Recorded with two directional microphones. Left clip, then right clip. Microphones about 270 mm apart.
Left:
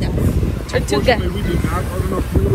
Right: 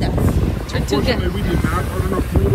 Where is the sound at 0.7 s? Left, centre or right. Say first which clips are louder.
Left 4 dB; centre.